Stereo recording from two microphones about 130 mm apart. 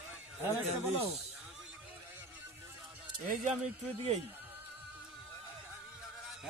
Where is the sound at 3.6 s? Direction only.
55° right (ahead or behind).